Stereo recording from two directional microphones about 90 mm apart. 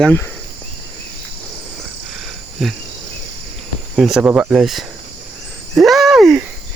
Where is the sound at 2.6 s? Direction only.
Centre (ahead or behind).